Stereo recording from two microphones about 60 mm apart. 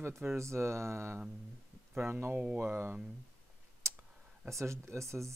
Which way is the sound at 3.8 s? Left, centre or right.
Right.